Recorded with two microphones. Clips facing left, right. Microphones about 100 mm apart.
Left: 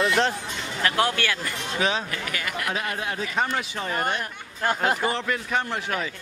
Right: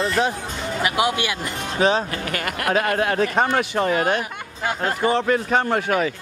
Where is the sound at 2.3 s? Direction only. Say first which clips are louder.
Right 8 dB; 60° right (ahead or behind).